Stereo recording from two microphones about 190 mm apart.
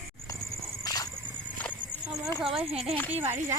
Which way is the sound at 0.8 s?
20° left (ahead or behind).